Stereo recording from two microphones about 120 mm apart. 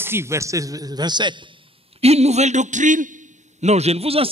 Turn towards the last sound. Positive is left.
turn(degrees=-55)  # may be behind; listen again after turning